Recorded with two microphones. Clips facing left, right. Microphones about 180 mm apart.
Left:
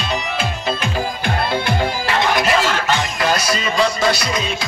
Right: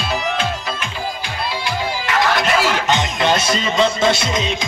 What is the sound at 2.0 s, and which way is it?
Music, 25° left (ahead or behind).